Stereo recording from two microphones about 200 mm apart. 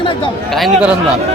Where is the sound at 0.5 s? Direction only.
Centre (ahead or behind).